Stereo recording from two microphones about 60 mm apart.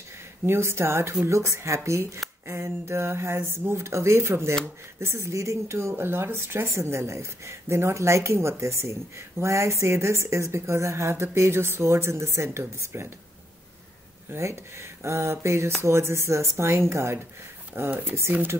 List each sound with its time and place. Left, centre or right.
0.5 s speech: right
14.3 s speech: right